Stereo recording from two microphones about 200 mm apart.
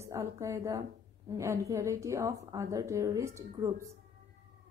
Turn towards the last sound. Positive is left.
turn(degrees=-15)  # may be behind; listen again after turning